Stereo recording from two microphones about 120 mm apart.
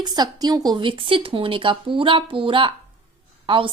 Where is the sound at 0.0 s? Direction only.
35° right (ahead or behind).